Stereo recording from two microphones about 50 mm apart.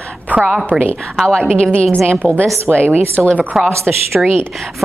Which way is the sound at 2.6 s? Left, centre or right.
Right.